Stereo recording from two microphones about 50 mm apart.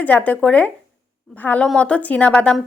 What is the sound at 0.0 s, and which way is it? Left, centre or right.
A woman's voice, left.